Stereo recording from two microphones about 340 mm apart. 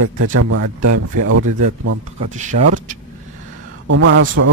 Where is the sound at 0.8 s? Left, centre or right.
Right.